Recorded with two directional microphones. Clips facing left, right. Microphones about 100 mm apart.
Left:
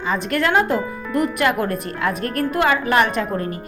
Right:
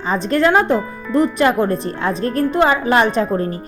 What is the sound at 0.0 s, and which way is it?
A woman's voice, 30° right (ahead or behind).